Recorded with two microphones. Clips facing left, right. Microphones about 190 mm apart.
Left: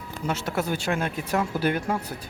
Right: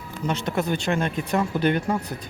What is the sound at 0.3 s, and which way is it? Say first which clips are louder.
Speech: right 2 dB; 5° left (ahead or behind).